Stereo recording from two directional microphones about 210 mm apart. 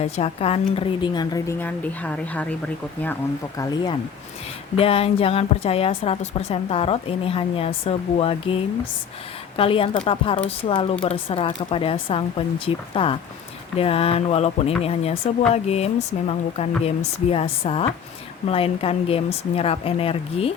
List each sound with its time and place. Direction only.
0.0 s a woman's voice: 30° left (ahead or behind); by 2.6 s 5° left (ahead or behind)
3.6 s a woman's voice: 20° left (ahead or behind)
9.6 s a woman's voice: 25° left (ahead or behind)